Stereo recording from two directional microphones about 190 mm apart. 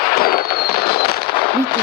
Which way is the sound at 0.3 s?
55° left (ahead or behind).